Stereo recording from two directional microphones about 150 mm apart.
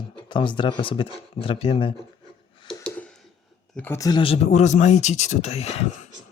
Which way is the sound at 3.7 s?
15° left (ahead or behind).